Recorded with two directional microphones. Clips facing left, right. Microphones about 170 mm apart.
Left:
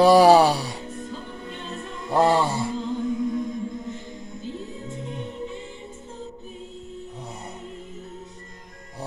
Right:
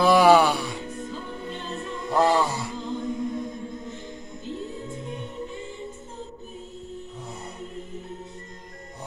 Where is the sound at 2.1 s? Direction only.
30° left (ahead or behind).